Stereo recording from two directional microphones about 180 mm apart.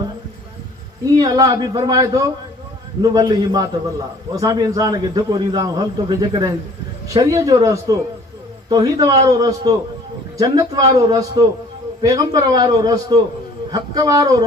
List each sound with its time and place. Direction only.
1.0 s a man's voice: 20° right (ahead or behind)